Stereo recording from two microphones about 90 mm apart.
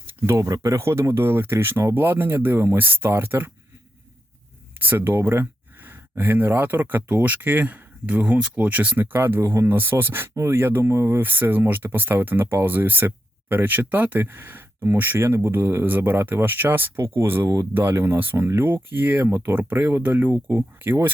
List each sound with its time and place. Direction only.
0.1 s speech: 30° right (ahead or behind)
4.8 s speech: 20° right (ahead or behind)